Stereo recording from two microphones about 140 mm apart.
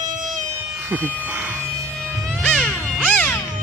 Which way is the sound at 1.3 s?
10° right (ahead or behind).